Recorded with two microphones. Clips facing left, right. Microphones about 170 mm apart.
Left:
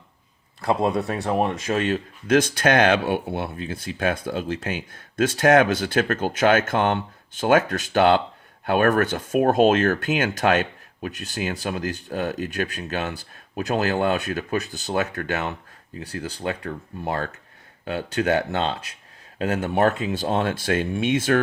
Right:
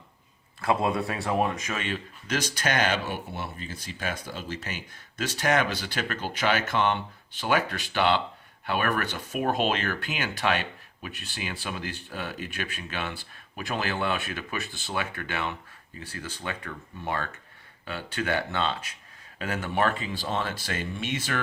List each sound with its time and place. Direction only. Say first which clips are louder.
0.8 s speech: left 5 dB; centre (ahead or behind)
1.2 s speech: left 3 dB; 20° left (ahead or behind)
1.7 s speech: left 9 dB; 50° left (ahead or behind)